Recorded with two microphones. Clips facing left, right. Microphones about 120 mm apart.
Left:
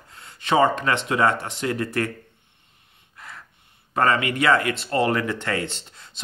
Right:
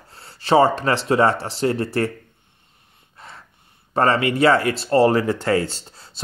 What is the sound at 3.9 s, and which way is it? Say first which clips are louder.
Speech: right 3 dB; 30° right (ahead or behind).